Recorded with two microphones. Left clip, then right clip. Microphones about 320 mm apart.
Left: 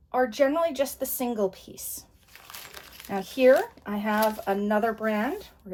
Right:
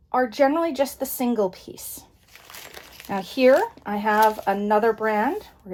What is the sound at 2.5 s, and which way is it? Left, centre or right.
Crumpling, centre.